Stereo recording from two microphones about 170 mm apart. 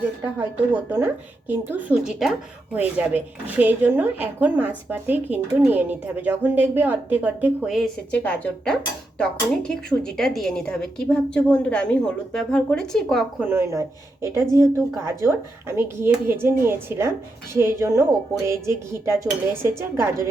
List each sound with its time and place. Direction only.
0.3 s a woman's voice: 10° right (ahead or behind); by 13.2 s 5° left (ahead or behind)
13.4 s a woman's voice: 15° right (ahead or behind)